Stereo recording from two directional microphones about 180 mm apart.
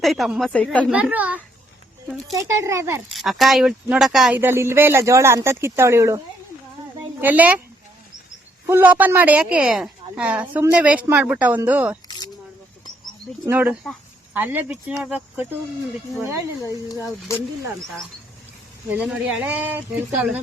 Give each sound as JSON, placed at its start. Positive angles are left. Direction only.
{"t": 0.0, "sound": "speech", "side_deg": 0}
{"t": 0.9, "sound": "a woman's voice", "side_deg": -5}
{"t": 3.1, "sound": "speech", "side_deg": 0}
{"t": 4.4, "sound": "a woman's voice", "side_deg": -15}
{"t": 7.2, "sound": "a woman's voice", "side_deg": -10}
{"t": 8.6, "sound": "a woman's voice", "side_deg": -10}
{"t": 13.4, "sound": "a woman's voice", "side_deg": -10}
{"t": 16.6, "sound": "speech", "side_deg": 15}
{"t": 18.9, "sound": "a woman's voice", "side_deg": -5}